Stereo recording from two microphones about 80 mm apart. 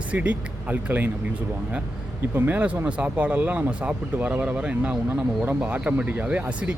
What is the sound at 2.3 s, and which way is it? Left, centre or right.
Speech, right.